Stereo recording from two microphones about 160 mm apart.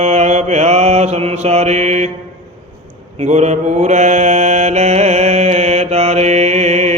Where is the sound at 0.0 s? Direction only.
45° right (ahead or behind).